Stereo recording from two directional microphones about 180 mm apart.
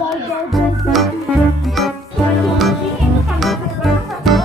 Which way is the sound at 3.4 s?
Centre (ahead or behind).